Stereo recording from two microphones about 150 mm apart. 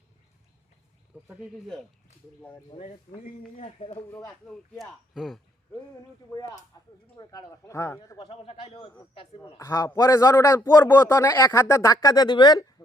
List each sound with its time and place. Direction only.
1.3 s speech: 5° right (ahead or behind)
2.7 s a man's voice: 30° left (ahead or behind)
3.6 s speech: 45° left (ahead or behind)
4.1 s a man's voice: 20° left (ahead or behind)
4.4 s speech: 5° left (ahead or behind)
6.7 s a sound: 25° left (ahead or behind)
7.2 s a man's voice: 25° left (ahead or behind)
8.2 s a man's voice: 40° left (ahead or behind)
9.6 s a man's voice: 20° left (ahead or behind)